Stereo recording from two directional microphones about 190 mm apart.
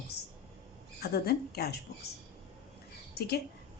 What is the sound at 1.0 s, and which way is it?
Speech, 55° left (ahead or behind).